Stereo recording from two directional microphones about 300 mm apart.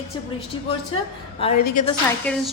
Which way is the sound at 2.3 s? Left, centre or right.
Centre.